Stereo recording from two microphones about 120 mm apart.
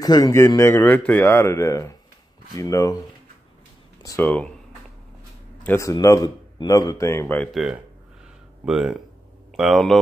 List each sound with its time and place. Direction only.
0.0 s speech: 30° left (ahead or behind)
4.2 s speech: 10° left (ahead or behind)
5.8 s speech: 25° left (ahead or behind)
7.5 s speech: 5° right (ahead or behind)